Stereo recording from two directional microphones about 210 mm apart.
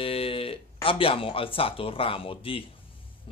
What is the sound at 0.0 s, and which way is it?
Speech, 25° left (ahead or behind).